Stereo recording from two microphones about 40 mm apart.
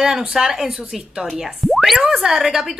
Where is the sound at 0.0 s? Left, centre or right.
Centre.